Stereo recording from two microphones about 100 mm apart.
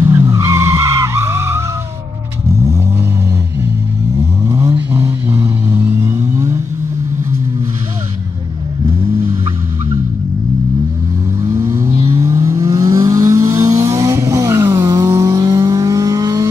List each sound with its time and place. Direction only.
0.3 s skidding: 25° right (ahead or behind)
2.6 s vehicle: 30° right (ahead or behind)
11.5 s vehicle: 30° right (ahead or behind)
11.9 s vehicle: 55° right (ahead or behind)
12.2 s vehicle: 35° right (ahead or behind)